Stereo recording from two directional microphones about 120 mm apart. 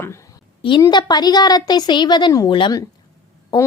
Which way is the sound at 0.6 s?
40° left (ahead or behind).